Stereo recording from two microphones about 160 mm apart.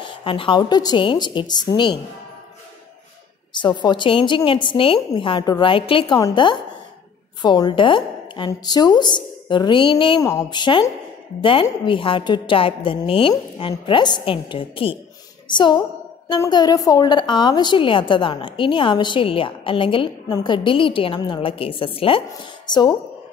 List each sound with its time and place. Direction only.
0.0 s a woman's voice: 30° left (ahead or behind)
3.5 s a woman's voice: 30° left (ahead or behind)